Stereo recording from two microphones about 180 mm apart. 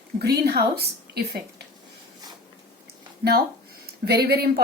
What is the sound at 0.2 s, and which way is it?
Speech, 65° right (ahead or behind).